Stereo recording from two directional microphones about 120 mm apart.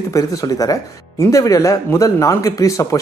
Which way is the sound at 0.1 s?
30° left (ahead or behind).